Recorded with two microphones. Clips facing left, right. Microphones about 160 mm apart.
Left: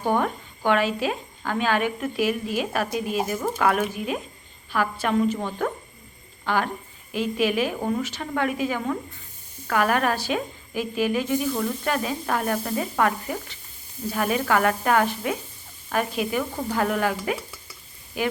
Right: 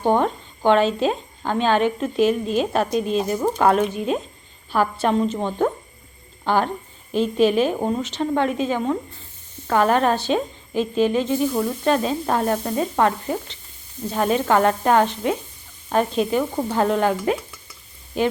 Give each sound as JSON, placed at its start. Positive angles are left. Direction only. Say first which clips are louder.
{"t": 0.0, "sound": "speech", "louder": "right 4 dB", "side_deg": -25}